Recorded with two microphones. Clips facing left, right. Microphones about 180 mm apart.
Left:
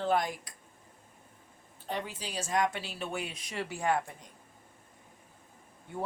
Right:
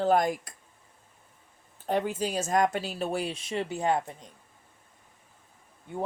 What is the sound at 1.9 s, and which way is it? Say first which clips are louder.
Speech: right 9 dB; 45° right (ahead or behind).